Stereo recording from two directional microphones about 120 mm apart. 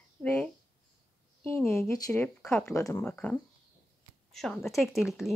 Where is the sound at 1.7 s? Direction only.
25° left (ahead or behind).